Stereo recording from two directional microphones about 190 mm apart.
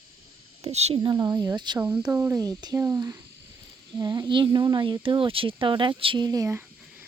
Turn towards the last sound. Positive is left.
turn(degrees=-10)  # may be behind; listen again after turning